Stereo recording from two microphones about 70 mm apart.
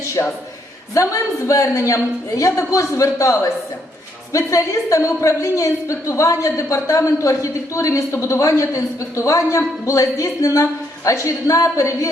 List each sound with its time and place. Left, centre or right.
0.2 s speech: left